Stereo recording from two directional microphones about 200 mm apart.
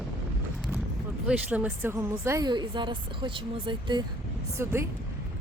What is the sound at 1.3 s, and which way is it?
A woman's voice, 5° right (ahead or behind).